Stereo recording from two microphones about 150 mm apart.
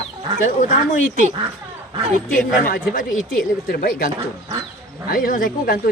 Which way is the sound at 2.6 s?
70° left (ahead or behind).